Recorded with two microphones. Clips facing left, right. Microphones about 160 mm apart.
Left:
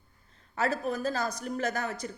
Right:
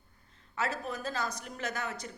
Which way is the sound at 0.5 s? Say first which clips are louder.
Left 5 dB; 40° left (ahead or behind).